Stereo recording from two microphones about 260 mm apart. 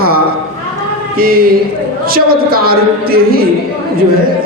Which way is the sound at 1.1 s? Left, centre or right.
Right.